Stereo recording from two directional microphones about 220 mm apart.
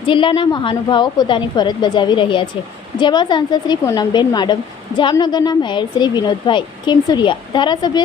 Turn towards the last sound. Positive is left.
turn(degrees=20)  # may be behind; listen again after turning